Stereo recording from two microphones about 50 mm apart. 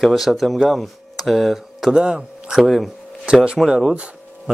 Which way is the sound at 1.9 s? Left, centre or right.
Centre.